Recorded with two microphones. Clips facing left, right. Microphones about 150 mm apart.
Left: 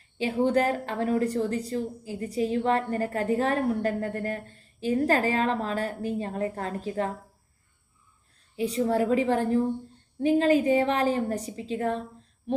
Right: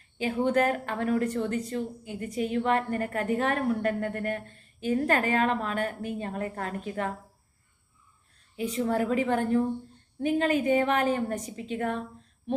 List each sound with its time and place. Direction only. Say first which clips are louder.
0.2 s a woman's voice: left 1 dB; 30° left (ahead or behind)
8.5 s a woman's voice: left 3 dB; 35° left (ahead or behind)